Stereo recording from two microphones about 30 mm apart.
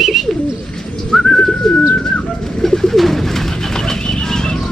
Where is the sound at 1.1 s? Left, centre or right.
Left.